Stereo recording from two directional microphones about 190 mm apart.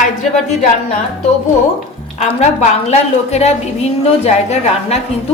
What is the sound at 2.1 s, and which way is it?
A woman's voice, 35° left (ahead or behind).